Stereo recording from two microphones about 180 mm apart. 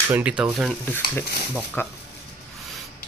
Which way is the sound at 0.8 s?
10° left (ahead or behind).